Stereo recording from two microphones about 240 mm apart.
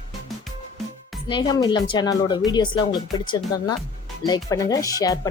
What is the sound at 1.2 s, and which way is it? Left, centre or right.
Speech, centre.